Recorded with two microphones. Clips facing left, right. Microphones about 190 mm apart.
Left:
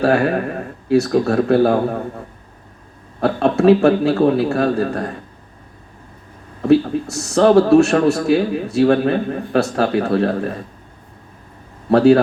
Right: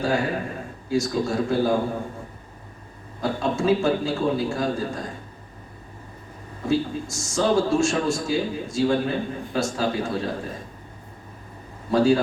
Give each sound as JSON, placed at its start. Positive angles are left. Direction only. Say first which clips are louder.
{"t": 0.0, "sound": "a man's voice", "louder": "left 8 dB", "side_deg": 65}
{"t": 3.2, "sound": "a man's voice", "louder": "left 8 dB", "side_deg": 65}
{"t": 6.6, "sound": "a man's voice", "louder": "left 10 dB", "side_deg": 65}
{"t": 11.9, "sound": "a man's voice", "louder": "left 8 dB", "side_deg": 65}